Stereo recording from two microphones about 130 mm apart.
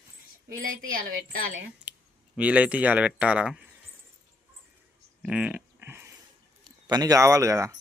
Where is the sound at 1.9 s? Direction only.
10° right (ahead or behind).